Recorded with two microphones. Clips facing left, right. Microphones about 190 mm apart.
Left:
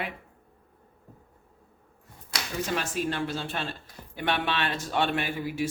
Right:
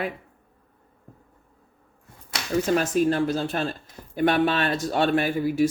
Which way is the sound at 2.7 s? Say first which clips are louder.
Right 9 dB; 40° right (ahead or behind).